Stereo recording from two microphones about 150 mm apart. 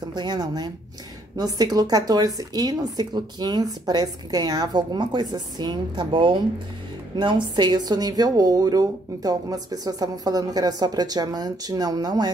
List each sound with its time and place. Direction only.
0.1 s a woman's voice: 30° right (ahead or behind)